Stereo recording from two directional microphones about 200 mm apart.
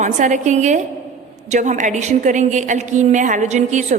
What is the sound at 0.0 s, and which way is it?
A woman's voice, 40° right (ahead or behind).